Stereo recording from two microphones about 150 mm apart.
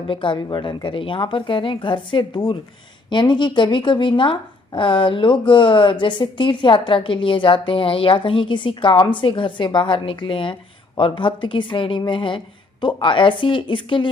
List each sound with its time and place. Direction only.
0.1 s speech: 35° left (ahead or behind)